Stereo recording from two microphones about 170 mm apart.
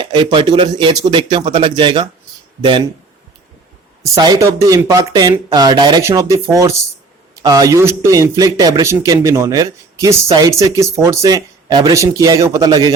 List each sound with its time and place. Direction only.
0.0 s speech: 30° right (ahead or behind)
4.0 s speech: 25° right (ahead or behind)